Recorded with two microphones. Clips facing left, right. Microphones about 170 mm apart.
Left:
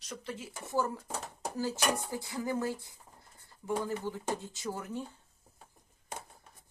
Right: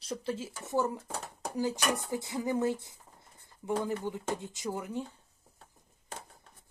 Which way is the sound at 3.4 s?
20° right (ahead or behind).